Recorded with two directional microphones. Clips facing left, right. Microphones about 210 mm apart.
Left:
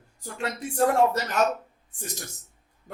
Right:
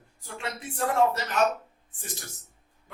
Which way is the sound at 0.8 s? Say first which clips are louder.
Left 3 dB; 45° left (ahead or behind).